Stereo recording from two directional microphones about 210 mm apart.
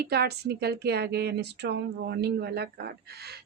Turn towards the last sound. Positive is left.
turn(degrees=-50)  # may be behind; listen again after turning